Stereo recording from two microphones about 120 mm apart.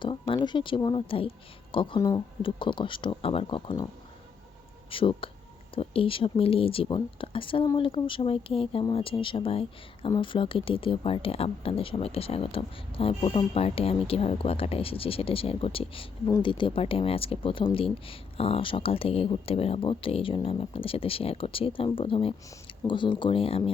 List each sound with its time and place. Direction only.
0.0 s speech: 45° left (ahead or behind)
4.9 s speech: 45° left (ahead or behind)